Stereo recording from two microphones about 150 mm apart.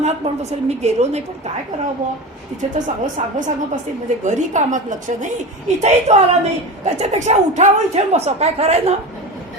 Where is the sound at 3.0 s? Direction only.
55° right (ahead or behind).